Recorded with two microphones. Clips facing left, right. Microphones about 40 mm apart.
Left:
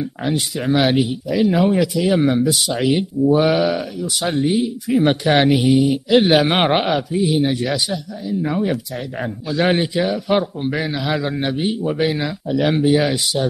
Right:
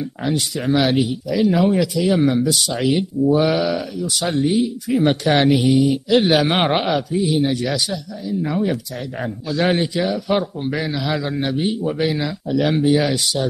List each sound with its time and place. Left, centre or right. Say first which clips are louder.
0.6 s a man's voice: left 1 dB; centre